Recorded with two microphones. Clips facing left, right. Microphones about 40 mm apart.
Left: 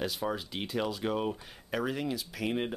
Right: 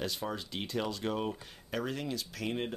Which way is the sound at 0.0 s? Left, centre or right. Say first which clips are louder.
Left 3 dB; centre.